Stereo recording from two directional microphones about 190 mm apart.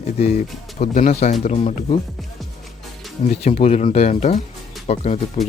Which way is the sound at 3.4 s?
35° left (ahead or behind).